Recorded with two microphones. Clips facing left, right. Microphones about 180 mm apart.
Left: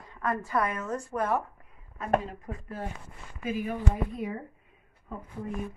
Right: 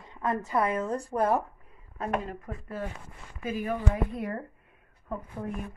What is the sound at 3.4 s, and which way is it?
Speech, 45° right (ahead or behind).